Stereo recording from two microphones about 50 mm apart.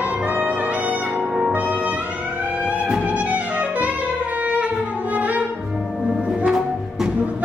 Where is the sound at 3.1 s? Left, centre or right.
Right.